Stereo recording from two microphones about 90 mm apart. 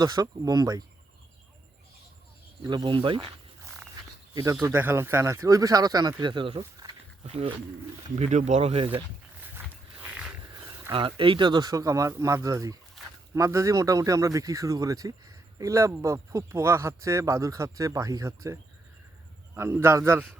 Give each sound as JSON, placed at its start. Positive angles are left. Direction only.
{"t": 0.0, "sound": "speech", "side_deg": -45}
{"t": 2.6, "sound": "speech", "side_deg": -55}
{"t": 4.6, "sound": "speech", "side_deg": -25}
{"t": 6.8, "sound": "a sound", "side_deg": -40}
{"t": 8.7, "sound": "speech", "side_deg": -80}
{"t": 10.9, "sound": "a man's voice", "side_deg": -75}